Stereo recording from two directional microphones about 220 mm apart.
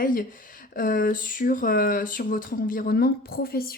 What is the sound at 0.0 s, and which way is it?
Speech, 40° left (ahead or behind).